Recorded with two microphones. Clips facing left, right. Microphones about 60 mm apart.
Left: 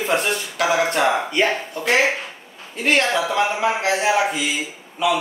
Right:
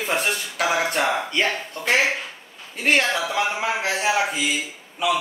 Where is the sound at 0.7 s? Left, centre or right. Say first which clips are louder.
Left 4 dB; centre.